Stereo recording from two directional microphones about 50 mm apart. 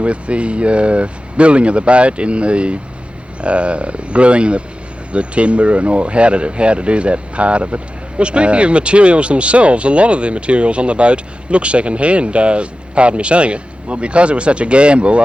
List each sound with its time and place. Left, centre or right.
0.0 s speech: right